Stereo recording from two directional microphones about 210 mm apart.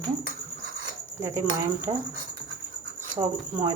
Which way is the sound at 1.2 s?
10° right (ahead or behind).